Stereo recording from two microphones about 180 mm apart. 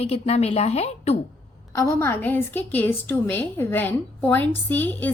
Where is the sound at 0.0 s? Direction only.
35° left (ahead or behind).